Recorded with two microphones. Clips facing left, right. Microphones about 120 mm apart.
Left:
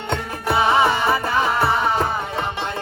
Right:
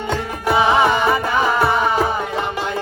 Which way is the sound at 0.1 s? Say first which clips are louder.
Right 2 dB; centre (ahead or behind).